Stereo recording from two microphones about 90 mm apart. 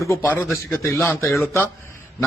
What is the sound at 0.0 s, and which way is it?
Speech, 35° left (ahead or behind).